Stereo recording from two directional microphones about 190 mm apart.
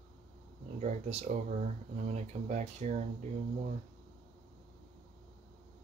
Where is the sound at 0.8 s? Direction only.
35° right (ahead or behind).